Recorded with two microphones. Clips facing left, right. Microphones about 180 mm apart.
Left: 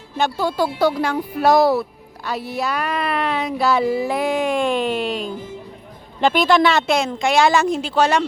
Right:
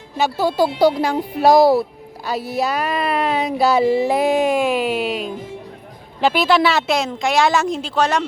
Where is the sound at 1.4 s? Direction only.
35° right (ahead or behind).